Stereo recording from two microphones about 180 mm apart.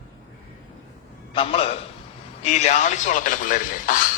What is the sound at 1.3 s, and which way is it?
A man's voice, 30° left (ahead or behind).